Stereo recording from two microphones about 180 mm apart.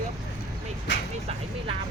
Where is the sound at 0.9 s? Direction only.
90° left.